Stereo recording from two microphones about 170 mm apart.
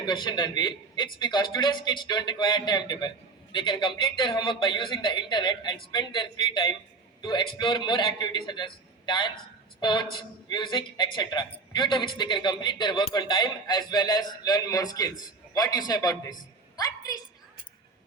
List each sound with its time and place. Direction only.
0.0 s a man's voice: 25° left (ahead or behind)